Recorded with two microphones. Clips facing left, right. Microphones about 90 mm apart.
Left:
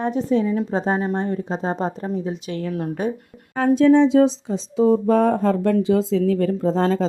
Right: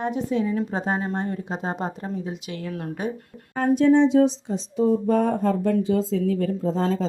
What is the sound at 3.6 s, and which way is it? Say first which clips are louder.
Speech: left 3 dB; 90° left.